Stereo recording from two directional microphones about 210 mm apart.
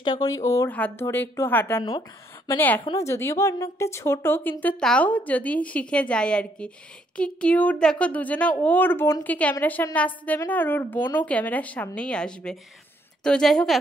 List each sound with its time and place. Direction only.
0.0 s a woman's voice: 20° left (ahead or behind); by 13.7 s centre (ahead or behind)